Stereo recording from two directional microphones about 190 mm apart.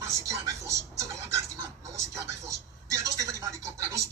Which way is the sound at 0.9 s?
15° right (ahead or behind).